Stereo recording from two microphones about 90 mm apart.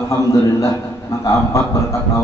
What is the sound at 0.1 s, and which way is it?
A man's voice, 35° left (ahead or behind).